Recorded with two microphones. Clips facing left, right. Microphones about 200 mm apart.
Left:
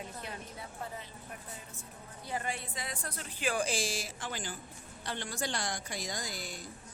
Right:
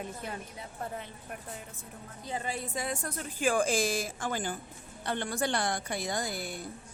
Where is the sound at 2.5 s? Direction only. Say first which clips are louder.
Right 6 dB; 45° right (ahead or behind).